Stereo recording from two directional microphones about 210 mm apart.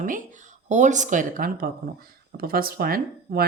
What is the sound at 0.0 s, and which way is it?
Speech, 40° right (ahead or behind).